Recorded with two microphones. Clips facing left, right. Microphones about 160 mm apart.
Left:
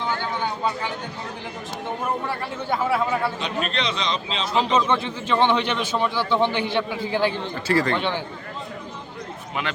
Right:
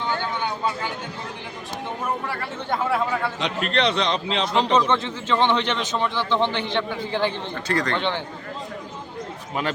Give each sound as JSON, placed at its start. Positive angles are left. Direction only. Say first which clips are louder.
{"t": 2.6, "sound": "speech", "louder": "left 1 dB", "side_deg": 5}
{"t": 3.4, "sound": "a man's voice", "louder": "right 3 dB", "side_deg": -65}
{"t": 4.9, "sound": "speech", "louder": "even", "side_deg": 15}